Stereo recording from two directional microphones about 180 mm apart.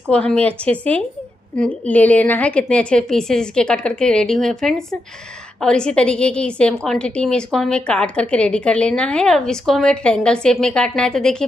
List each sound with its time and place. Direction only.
0.0 s a woman's voice: 5° left (ahead or behind)